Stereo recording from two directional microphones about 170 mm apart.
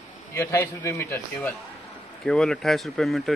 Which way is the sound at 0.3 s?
15° left (ahead or behind).